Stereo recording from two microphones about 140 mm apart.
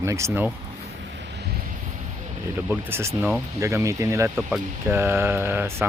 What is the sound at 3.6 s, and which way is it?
Speech, 20° right (ahead or behind).